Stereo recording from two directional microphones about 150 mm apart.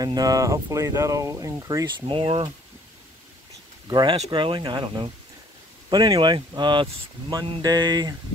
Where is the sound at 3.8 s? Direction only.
30° right (ahead or behind).